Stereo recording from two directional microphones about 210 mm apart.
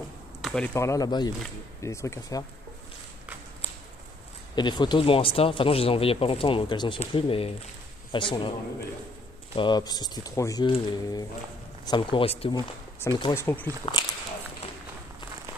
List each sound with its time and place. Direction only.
0.4 s a sound: 5° left (ahead or behind)
0.7 s speech: 15° left (ahead or behind)
4.6 s speech: 20° left (ahead or behind)
9.6 s speech: 20° left (ahead or behind)
13.0 s speech: 15° left (ahead or behind)
13.9 s speech: 25° left (ahead or behind)